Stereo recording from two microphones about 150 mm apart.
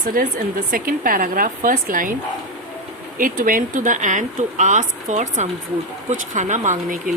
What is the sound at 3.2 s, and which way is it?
Speech, 65° right (ahead or behind).